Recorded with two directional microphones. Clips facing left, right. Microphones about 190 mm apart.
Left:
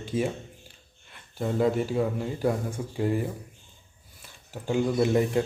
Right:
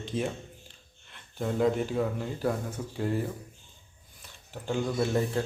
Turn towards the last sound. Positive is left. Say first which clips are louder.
# left 4 dB
turn(degrees=15)  # may be behind; listen again after turning